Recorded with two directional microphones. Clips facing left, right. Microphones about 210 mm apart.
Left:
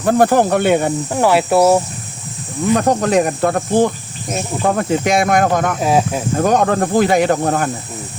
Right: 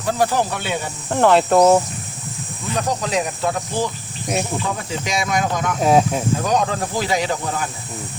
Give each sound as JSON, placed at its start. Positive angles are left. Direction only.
{"t": 0.0, "sound": "speech", "side_deg": 55}
{"t": 1.1, "sound": "speech", "side_deg": 10}
{"t": 2.7, "sound": "speech", "side_deg": 55}
{"t": 5.8, "sound": "speech", "side_deg": 0}
{"t": 6.3, "sound": "speech", "side_deg": 55}